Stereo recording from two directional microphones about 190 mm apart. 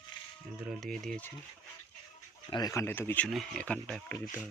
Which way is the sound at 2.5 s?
20° left (ahead or behind).